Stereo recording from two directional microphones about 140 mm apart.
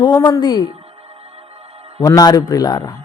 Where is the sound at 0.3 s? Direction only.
30° left (ahead or behind).